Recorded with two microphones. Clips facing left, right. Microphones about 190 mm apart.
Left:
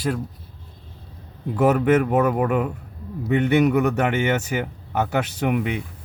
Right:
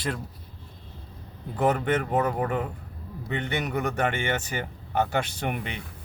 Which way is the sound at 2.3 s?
75° left (ahead or behind).